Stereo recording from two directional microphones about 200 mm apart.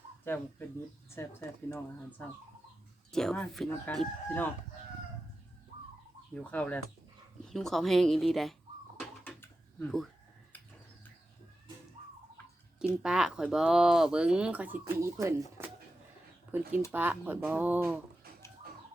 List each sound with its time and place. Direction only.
0.3 s speech: 10° left (ahead or behind)
6.3 s speech: 5° left (ahead or behind)
9.0 s a sound: 10° left (ahead or behind)
13.0 s speech: 5° right (ahead or behind)